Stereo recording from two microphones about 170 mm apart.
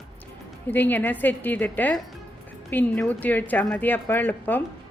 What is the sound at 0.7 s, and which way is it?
A woman's voice, 10° left (ahead or behind).